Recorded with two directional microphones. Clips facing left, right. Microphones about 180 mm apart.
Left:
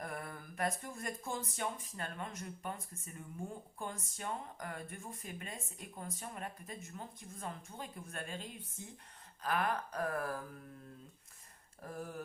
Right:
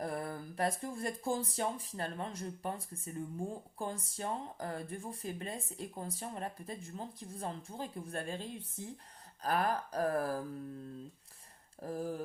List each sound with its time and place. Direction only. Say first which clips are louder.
0.0 s speech: right 6 dB; 30° right (ahead or behind)
11.8 s speech: right 6 dB; 30° right (ahead or behind)